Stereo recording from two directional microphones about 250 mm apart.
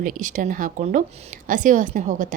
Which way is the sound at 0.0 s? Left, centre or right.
Right.